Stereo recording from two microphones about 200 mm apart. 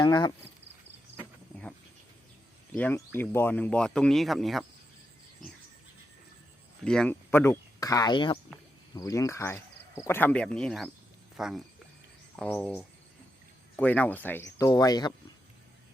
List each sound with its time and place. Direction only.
0.0 s speech: 20° left (ahead or behind)
2.7 s speech: 10° left (ahead or behind)
6.8 s speech: 5° left (ahead or behind); by 15.1 s 20° left (ahead or behind)